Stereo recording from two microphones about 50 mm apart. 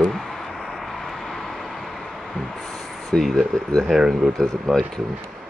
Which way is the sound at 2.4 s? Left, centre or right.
Centre.